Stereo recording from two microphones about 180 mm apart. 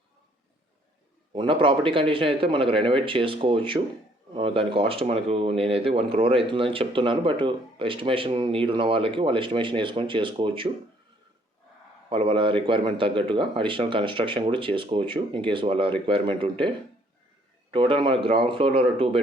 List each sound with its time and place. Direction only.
1.3 s speech: 30° right (ahead or behind)
12.0 s speech: 30° right (ahead or behind)